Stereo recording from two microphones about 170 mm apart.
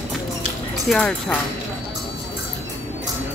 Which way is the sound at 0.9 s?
5° left (ahead or behind).